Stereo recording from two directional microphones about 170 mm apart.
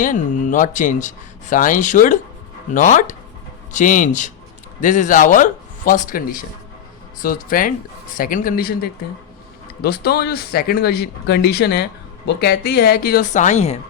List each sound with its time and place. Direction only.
0.0 s a man's voice: 50° left (ahead or behind)
13.3 s speech: 45° left (ahead or behind)